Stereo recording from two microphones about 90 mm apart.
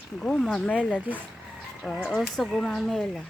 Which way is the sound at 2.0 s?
5° left (ahead or behind).